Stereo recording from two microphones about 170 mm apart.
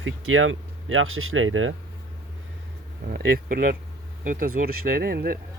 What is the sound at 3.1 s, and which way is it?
Speech, 60° right (ahead or behind).